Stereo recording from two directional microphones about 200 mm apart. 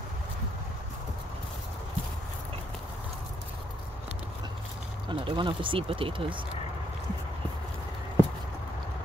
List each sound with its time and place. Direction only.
5.0 s speech: 25° right (ahead or behind)